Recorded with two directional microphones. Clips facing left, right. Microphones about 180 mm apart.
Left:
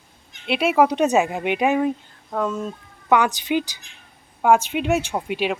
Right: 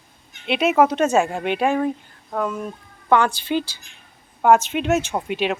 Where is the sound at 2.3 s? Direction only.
10° right (ahead or behind).